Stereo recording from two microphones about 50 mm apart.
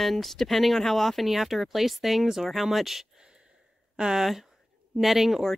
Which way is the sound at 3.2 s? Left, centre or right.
Centre.